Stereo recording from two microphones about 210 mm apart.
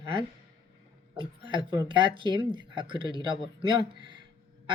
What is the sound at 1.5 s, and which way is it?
Speech, 20° right (ahead or behind).